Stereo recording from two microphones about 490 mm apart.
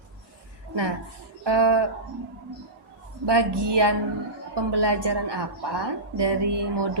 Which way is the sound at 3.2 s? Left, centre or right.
Right.